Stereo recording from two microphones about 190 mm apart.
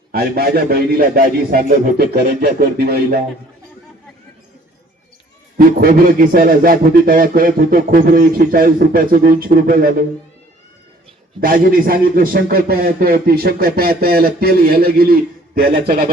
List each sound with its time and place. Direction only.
0.1 s speech: 55° right (ahead or behind)
5.5 s speech: 50° right (ahead or behind)
11.3 s speech: 50° right (ahead or behind)